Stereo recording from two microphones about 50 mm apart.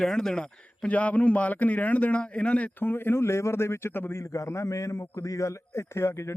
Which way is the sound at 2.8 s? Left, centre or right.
Left.